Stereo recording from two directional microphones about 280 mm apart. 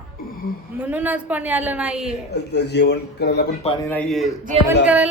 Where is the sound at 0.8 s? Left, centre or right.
Centre.